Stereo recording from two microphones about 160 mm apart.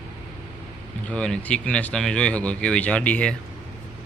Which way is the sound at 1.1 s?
5° left (ahead or behind).